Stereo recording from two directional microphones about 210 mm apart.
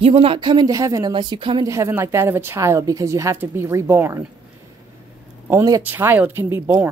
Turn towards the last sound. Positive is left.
turn(degrees=-10)  # may be behind; listen again after turning